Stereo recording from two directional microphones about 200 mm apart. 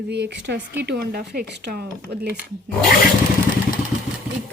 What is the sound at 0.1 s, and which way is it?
Speech, 60° right (ahead or behind).